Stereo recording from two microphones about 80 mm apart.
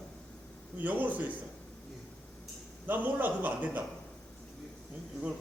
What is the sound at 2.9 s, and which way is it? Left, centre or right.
Speech, right.